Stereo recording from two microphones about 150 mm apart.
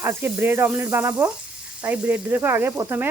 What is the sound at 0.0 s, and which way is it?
Speech, 15° right (ahead or behind).